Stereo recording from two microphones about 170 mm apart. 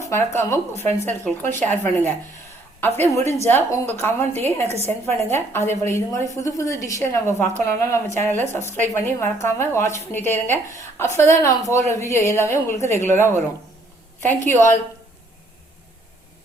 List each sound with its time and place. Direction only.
0.0 s a woman's voice: 15° left (ahead or behind)
14.4 s a woman's voice: 15° left (ahead or behind)